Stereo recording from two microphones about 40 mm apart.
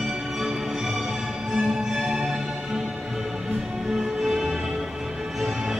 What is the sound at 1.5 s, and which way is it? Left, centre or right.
Music, centre.